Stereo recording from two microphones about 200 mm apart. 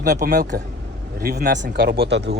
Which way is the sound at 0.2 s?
45° right (ahead or behind).